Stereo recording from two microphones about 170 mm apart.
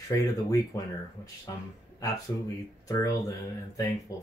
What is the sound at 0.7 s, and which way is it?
Speech, 15° left (ahead or behind).